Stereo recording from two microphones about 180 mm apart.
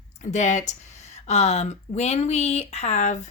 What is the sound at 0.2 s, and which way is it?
A woman's voice, 40° left (ahead or behind).